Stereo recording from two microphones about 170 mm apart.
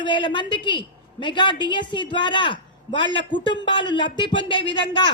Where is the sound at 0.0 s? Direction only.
30° left (ahead or behind).